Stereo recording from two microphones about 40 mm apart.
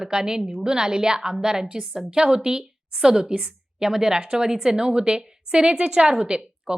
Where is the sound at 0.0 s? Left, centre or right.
Centre.